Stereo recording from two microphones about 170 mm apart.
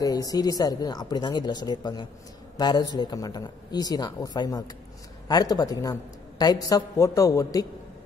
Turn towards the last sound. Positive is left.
turn(degrees=20)  # may be behind; listen again after turning